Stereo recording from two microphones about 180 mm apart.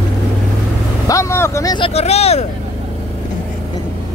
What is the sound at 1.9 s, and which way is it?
Speech, 35° left (ahead or behind).